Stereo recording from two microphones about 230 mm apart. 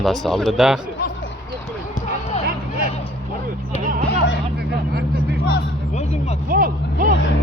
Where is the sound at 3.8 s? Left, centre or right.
Right.